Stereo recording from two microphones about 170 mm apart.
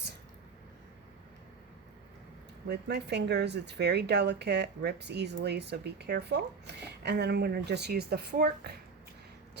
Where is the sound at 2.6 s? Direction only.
75° right (ahead or behind).